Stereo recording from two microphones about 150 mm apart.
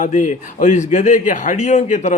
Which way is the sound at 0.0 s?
55° left (ahead or behind).